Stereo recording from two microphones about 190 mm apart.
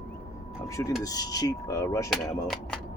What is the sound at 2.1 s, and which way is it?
Speech, centre (ahead or behind).